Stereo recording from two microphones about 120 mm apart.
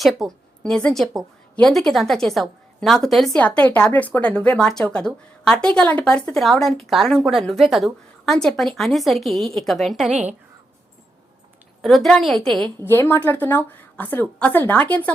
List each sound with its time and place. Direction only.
0.2 s a woman's voice: 5° left (ahead or behind)
11.8 s a woman's voice: centre (ahead or behind)
12.8 s a woman's voice: 20° left (ahead or behind)